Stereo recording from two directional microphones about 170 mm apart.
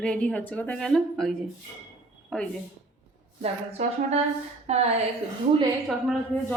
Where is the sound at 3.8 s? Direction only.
40° right (ahead or behind).